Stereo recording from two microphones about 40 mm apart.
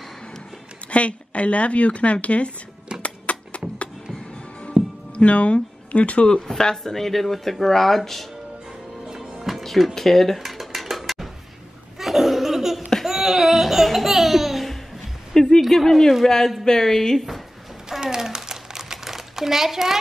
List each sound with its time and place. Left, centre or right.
0.8 s speech: left
3.0 s a sound: left
4.7 s music: right
5.1 s speech: left
6.6 s speech: centre
9.0 s music: centre
9.6 s music: centre
9.9 s dishes: centre
12.0 s laughter: centre
15.3 s a sound: centre
15.7 s speech: centre
17.8 s crumpling: centre